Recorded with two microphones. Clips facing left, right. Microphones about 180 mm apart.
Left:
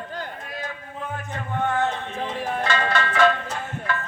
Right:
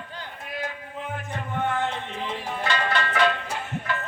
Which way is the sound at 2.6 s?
45° left (ahead or behind).